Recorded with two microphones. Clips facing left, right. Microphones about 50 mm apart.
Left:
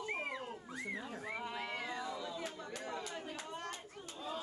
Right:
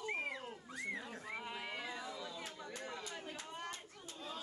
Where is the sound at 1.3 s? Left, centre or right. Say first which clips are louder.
Left 3 dB; centre.